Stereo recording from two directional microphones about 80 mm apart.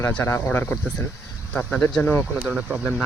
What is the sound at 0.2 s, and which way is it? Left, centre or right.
Speech, left.